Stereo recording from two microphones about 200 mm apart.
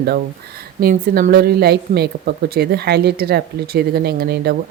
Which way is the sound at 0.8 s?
50° right (ahead or behind).